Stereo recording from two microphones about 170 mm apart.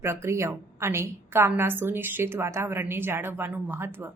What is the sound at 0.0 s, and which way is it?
Speech, 15° right (ahead or behind).